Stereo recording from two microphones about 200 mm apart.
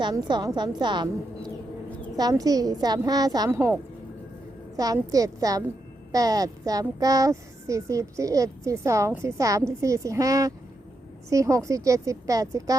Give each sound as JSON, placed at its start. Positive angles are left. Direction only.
{"t": 0.0, "sound": "a woman's voice", "side_deg": -20}
{"t": 2.1, "sound": "a woman's voice", "side_deg": -20}
{"t": 4.8, "sound": "speech", "side_deg": -15}